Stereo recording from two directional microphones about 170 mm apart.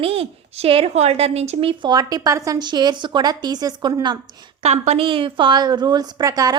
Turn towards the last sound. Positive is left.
turn(degrees=-20)  # may be behind; listen again after turning